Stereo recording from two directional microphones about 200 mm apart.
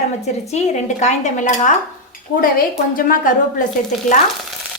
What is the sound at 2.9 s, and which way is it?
Speech, 45° left (ahead or behind).